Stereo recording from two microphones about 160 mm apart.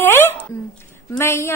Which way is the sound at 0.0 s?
15° left (ahead or behind).